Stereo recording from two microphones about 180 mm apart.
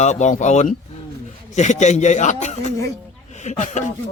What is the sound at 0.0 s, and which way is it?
Speech, 40° left (ahead or behind).